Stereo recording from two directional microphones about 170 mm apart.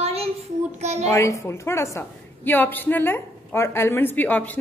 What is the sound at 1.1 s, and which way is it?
A woman's voice, 20° left (ahead or behind).